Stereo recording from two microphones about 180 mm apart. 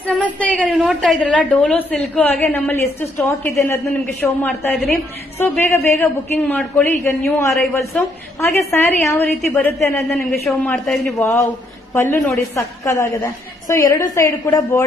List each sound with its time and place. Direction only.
0.0 s a sound: 5° left (ahead or behind)
0.7 s a man's voice: centre (ahead or behind)
7.9 s a woman's voice: 5° left (ahead or behind)
10.1 s a man's voice: centre (ahead or behind)
11.1 s a woman's voice: 15° left (ahead or behind)